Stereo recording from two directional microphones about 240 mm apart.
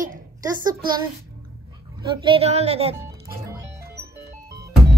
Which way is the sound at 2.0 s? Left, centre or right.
Right.